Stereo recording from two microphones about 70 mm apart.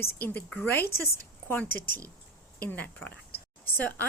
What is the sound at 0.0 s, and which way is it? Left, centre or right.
A woman's voice, left.